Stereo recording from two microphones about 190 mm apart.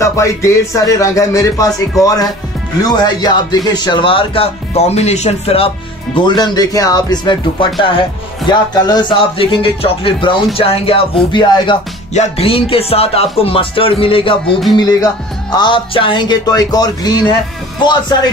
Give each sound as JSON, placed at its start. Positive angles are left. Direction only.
{"t": 0.0, "sound": "speech", "side_deg": 15}
{"t": 6.1, "sound": "speech", "side_deg": 25}
{"t": 8.5, "sound": "speech", "side_deg": 20}
{"t": 12.1, "sound": "speech", "side_deg": 35}